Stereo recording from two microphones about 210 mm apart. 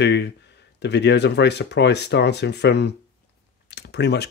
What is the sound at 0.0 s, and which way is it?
Speech, 55° left (ahead or behind).